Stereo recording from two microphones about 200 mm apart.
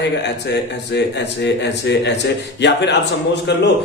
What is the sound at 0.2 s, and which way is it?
Speech, 60° left (ahead or behind).